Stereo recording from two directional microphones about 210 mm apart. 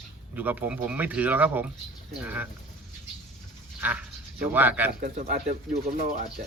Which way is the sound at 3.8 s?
10° right (ahead or behind).